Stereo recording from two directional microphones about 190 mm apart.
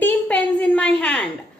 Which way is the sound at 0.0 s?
5° left (ahead or behind).